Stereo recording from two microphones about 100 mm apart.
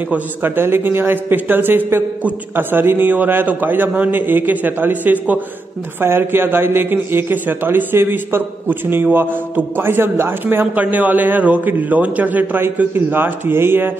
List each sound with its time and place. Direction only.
0.1 s a man's voice: 20° right (ahead or behind)